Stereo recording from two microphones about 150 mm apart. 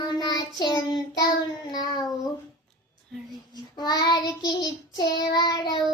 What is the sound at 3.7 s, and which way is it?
Child singing, 25° left (ahead or behind).